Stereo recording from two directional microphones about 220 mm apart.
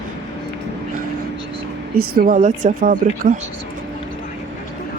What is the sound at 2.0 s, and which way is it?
Speech, 40° right (ahead or behind).